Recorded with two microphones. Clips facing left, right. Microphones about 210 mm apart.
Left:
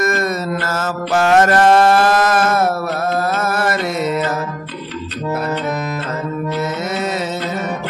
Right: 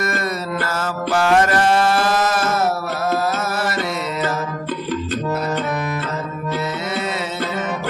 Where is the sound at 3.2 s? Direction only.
55° left (ahead or behind).